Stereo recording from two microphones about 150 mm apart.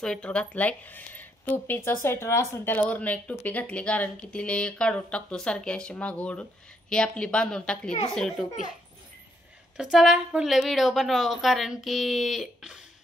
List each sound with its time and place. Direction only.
0.0 s a woman's voice: 5° left (ahead or behind)
9.8 s a woman's voice: 5° right (ahead or behind)